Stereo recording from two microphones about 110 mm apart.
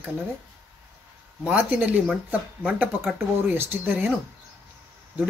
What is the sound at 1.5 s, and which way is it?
Speech, 15° right (ahead or behind).